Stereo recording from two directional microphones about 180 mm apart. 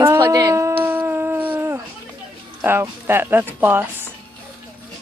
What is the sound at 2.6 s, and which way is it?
Speech, 10° right (ahead or behind).